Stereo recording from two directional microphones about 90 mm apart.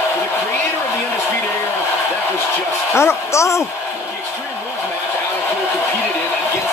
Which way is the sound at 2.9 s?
30° left (ahead or behind).